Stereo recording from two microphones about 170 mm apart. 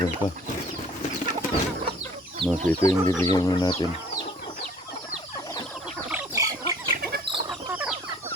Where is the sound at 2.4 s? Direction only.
30° right (ahead or behind).